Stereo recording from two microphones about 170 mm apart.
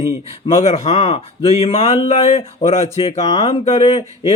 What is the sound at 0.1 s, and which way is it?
Speech, 35° left (ahead or behind).